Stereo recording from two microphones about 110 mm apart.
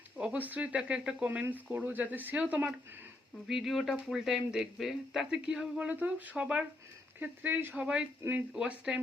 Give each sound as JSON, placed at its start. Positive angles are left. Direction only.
{"t": 0.2, "sound": "speech", "side_deg": -10}